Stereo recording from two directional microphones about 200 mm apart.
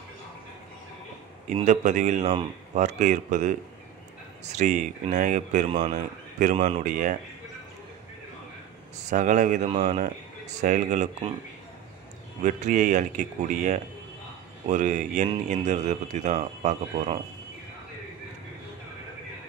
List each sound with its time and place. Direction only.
1.5 s speech: 35° right (ahead or behind)
9.1 s speech: 40° right (ahead or behind)
12.4 s speech: 40° right (ahead or behind)